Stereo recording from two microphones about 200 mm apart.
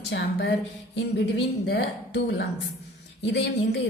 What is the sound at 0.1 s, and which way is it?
Speech, 60° left (ahead or behind).